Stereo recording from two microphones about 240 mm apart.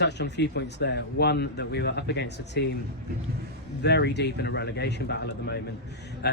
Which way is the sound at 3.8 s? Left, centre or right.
Left.